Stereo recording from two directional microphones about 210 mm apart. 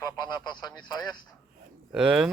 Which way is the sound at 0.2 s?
20° left (ahead or behind).